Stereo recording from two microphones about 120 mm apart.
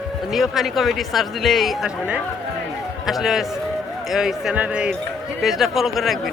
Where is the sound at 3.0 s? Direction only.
5° right (ahead or behind).